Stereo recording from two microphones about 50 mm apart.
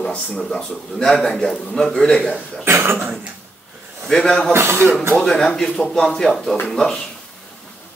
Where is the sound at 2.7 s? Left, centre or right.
Right.